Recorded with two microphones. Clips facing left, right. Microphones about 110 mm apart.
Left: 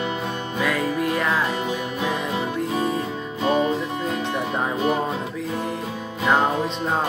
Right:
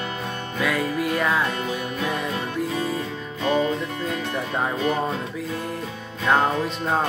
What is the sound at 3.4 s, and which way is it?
Music, 25° left (ahead or behind).